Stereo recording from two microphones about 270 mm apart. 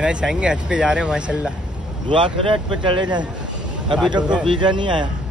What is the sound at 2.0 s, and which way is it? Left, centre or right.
Speech, centre.